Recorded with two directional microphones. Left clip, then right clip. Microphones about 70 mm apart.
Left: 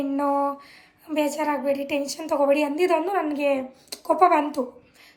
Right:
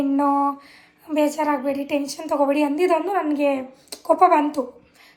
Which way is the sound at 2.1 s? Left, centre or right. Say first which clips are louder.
Even; left.